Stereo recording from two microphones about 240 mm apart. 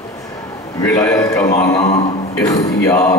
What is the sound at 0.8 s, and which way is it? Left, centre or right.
A man's voice, centre.